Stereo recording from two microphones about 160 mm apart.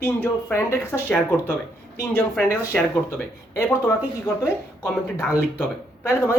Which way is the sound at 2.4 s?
20° left (ahead or behind).